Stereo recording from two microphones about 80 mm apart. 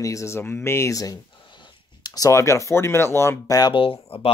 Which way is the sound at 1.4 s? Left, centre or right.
Left.